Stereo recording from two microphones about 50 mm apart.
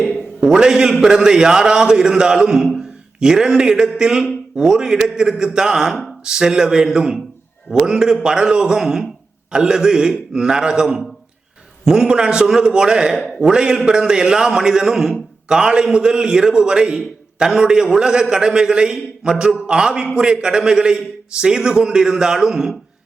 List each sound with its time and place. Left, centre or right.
0.4 s a man's voice: centre